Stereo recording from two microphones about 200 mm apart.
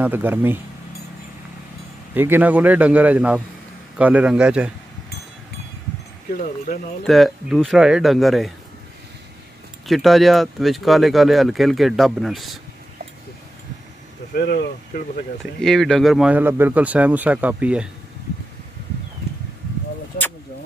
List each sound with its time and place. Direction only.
0.0 s speech: 10° right (ahead or behind)
2.1 s speech: 10° right (ahead or behind)
7.1 s speech: centre (ahead or behind)
9.8 s speech: centre (ahead or behind)
14.3 s speech: 50° left (ahead or behind)
15.6 s speech: 5° left (ahead or behind)